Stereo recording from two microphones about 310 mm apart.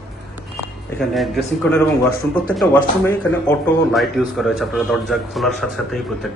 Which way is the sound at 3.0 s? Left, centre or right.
Centre.